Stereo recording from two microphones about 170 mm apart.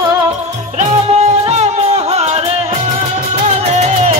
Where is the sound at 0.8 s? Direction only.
40° right (ahead or behind).